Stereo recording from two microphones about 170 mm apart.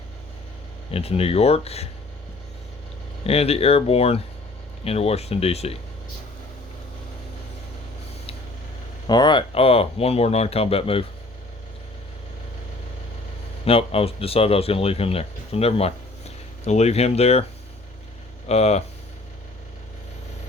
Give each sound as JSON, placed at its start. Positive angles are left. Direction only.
{"t": 0.9, "sound": "speech", "side_deg": 35}
{"t": 3.2, "sound": "speech", "side_deg": 35}
{"t": 9.0, "sound": "speech", "side_deg": 25}
{"t": 13.7, "sound": "speech", "side_deg": 35}
{"t": 18.4, "sound": "speech", "side_deg": 40}